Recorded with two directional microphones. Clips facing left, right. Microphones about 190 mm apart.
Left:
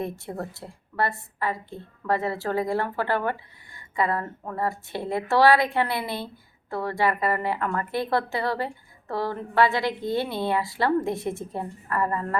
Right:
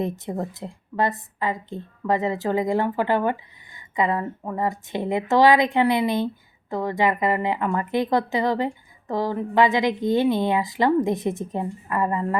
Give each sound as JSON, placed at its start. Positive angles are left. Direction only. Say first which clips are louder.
{"t": 0.0, "sound": "a woman's voice", "louder": "right 4 dB", "side_deg": -20}